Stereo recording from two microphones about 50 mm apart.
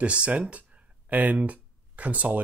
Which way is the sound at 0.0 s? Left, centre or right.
Right.